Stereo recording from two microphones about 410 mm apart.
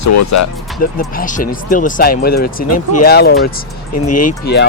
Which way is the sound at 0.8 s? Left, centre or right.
Left.